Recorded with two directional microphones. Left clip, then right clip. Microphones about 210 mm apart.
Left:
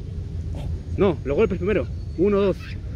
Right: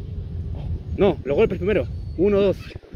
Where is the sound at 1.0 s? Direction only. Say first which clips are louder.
Right 2 dB; 20° right (ahead or behind).